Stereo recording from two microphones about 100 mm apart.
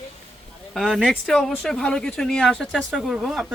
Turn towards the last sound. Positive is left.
turn(degrees=-5)  # may be behind; listen again after turning